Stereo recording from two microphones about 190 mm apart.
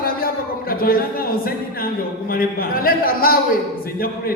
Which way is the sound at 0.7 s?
50° left (ahead or behind).